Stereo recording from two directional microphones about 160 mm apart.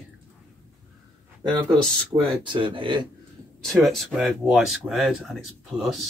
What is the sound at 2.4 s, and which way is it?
Speech, 30° right (ahead or behind).